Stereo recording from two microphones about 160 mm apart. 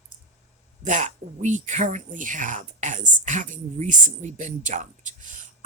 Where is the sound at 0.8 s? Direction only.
50° right (ahead or behind).